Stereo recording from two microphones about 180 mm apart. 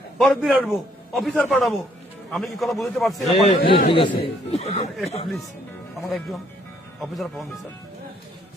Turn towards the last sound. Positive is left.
turn(degrees=0)  # may be behind; listen again after turning